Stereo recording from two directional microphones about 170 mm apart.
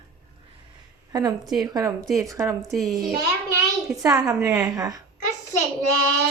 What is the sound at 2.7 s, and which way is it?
Speech, centre (ahead or behind).